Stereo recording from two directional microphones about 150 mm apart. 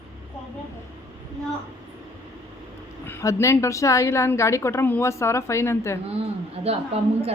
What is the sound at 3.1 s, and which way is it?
A woman's voice, 15° left (ahead or behind).